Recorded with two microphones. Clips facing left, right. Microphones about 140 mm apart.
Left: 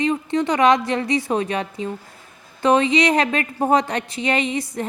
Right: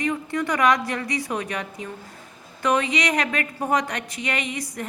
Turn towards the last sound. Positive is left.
turn(degrees=30)  # may be behind; listen again after turning